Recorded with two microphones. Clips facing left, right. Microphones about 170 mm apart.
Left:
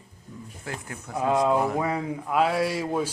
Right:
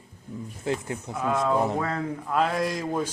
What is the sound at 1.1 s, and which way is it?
Speech, 20° left (ahead or behind).